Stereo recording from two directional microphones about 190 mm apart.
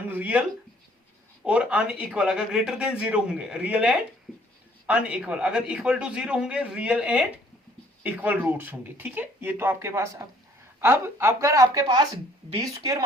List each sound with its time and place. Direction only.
0.1 s speech: 10° right (ahead or behind)
1.5 s speech: 5° right (ahead or behind); by 12.6 s 25° right (ahead or behind)